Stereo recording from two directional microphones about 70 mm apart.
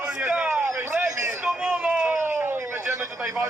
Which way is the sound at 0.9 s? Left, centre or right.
Centre.